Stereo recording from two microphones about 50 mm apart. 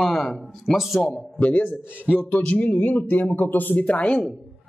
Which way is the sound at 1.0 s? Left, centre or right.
Left.